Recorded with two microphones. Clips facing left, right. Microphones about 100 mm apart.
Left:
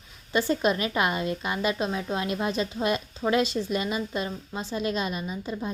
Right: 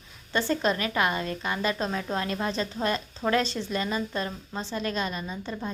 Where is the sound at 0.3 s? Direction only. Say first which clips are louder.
Left 2 dB; 15° left (ahead or behind).